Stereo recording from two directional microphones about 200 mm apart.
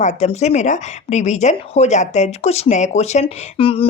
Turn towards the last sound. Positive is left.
turn(degrees=25)  # may be behind; listen again after turning